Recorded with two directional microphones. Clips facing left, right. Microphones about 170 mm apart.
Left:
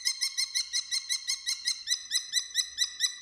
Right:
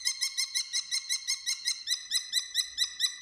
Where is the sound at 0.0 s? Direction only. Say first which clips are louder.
Even; 25° right (ahead or behind).